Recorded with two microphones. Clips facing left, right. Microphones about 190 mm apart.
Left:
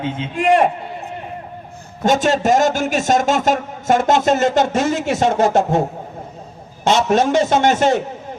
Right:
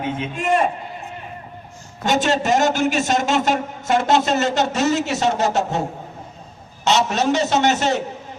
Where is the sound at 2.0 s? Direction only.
50° left (ahead or behind).